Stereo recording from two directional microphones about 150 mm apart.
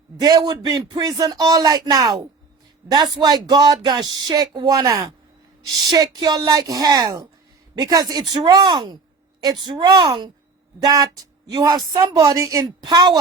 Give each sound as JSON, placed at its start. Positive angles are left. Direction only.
{"t": 0.2, "sound": "speech", "side_deg": -25}